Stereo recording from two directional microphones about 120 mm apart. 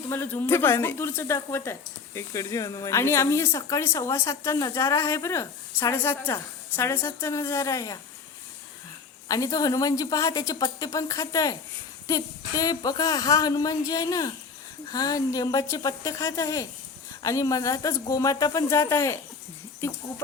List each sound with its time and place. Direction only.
0.1 s speech: 20° left (ahead or behind)
9.3 s speech: 30° left (ahead or behind)